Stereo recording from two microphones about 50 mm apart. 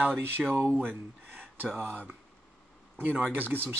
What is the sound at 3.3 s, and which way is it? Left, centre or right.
Speech, right.